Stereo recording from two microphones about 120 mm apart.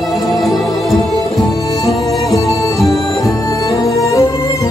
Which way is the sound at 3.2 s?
25° left (ahead or behind).